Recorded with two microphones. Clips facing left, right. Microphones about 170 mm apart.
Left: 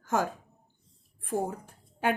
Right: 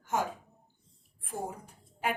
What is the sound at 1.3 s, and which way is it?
Speech, 75° left (ahead or behind).